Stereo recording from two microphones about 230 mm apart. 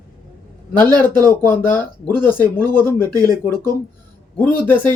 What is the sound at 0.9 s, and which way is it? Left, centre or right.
Speech, centre.